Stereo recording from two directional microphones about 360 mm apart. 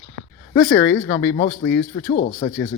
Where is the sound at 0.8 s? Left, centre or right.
Centre.